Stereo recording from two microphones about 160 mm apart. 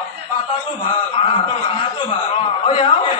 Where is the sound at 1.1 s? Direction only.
30° left (ahead or behind).